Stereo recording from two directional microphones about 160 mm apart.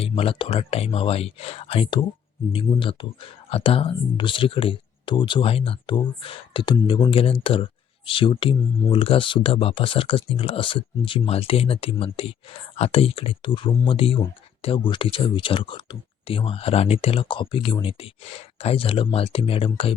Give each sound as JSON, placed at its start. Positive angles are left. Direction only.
{"t": 0.0, "sound": "speech", "side_deg": 35}